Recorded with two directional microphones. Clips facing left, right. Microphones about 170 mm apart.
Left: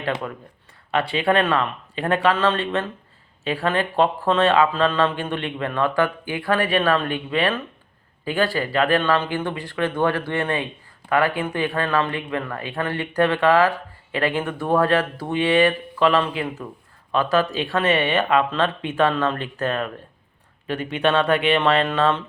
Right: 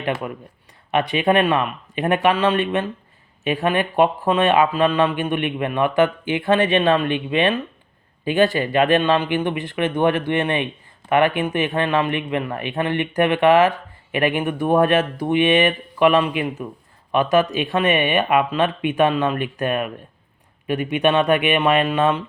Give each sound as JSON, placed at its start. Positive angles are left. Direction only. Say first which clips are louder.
{"t": 0.9, "sound": "speech", "louder": "right 2 dB", "side_deg": -20}